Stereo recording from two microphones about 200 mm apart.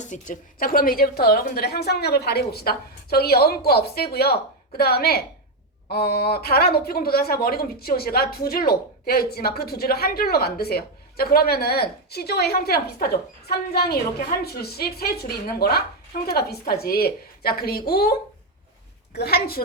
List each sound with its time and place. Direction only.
0.0 s a woman's voice: 40° left (ahead or behind)
19.1 s a woman's voice: 50° left (ahead or behind)